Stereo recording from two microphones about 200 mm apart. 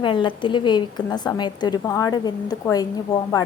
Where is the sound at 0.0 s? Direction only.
25° left (ahead or behind).